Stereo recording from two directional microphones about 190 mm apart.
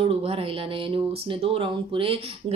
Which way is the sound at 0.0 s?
30° right (ahead or behind).